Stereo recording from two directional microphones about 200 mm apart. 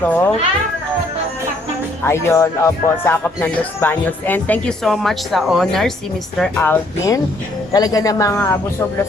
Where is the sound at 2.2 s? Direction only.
15° left (ahead or behind).